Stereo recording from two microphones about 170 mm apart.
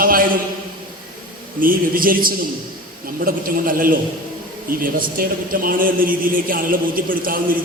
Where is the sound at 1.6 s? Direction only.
55° right (ahead or behind).